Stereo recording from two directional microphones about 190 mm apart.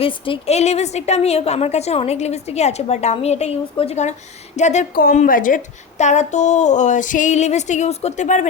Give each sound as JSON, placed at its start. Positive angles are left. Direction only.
{"t": 0.0, "sound": "a woman's voice", "side_deg": 30}